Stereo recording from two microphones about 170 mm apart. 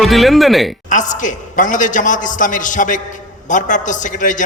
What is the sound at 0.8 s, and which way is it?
A man's voice, 50° left (ahead or behind).